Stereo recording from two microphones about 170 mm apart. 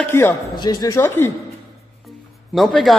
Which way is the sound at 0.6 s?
20° left (ahead or behind).